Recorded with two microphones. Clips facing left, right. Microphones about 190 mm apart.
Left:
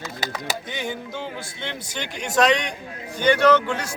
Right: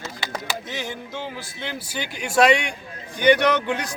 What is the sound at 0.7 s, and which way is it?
Music, centre (ahead or behind).